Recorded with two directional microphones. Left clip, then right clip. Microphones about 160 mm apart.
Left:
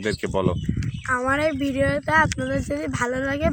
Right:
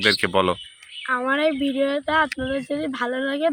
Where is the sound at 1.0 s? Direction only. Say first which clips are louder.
Right 1 dB; 35° left (ahead or behind).